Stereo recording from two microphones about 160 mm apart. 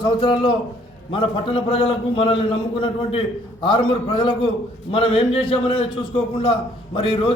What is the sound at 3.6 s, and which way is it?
A man's voice, 35° left (ahead or behind).